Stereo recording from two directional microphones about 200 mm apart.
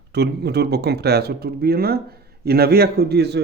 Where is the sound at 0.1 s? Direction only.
55° right (ahead or behind).